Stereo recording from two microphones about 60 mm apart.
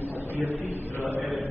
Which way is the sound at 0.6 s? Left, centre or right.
Left.